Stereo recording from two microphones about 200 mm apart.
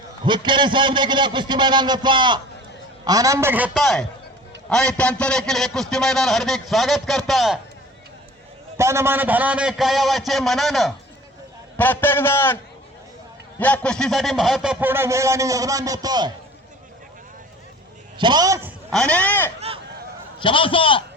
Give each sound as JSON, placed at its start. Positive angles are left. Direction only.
{"t": 0.3, "sound": "a man's voice", "side_deg": -25}
{"t": 8.8, "sound": "a man's voice", "side_deg": -15}
{"t": 13.6, "sound": "speech", "side_deg": 5}
{"t": 18.2, "sound": "a man's voice", "side_deg": -20}
{"t": 18.9, "sound": "a man's voice", "side_deg": 5}
{"t": 19.5, "sound": "speech", "side_deg": -30}
{"t": 20.4, "sound": "a man's voice", "side_deg": 25}